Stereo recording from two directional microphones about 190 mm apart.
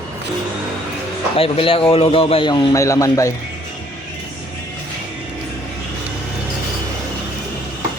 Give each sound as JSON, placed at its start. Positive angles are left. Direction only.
{"t": 1.4, "sound": "a man's voice", "side_deg": 30}